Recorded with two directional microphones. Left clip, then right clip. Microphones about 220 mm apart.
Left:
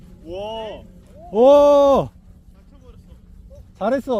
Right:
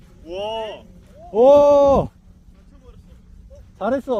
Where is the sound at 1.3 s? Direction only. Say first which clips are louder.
Even; 25° left (ahead or behind).